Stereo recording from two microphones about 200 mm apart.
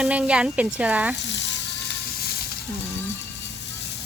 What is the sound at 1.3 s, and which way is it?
Frying, 60° left (ahead or behind).